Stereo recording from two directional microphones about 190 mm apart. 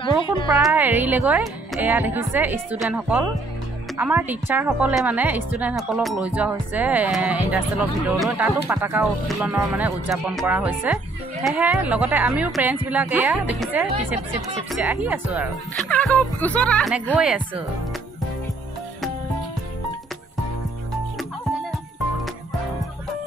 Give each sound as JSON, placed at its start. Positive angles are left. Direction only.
{"t": 0.0, "sound": "speech", "side_deg": 25}
{"t": 0.6, "sound": "a woman's voice", "side_deg": -5}
{"t": 15.9, "sound": "speech", "side_deg": 5}
{"t": 17.1, "sound": "speech", "side_deg": -5}